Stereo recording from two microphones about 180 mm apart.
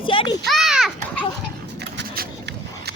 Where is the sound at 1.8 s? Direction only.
60° right (ahead or behind).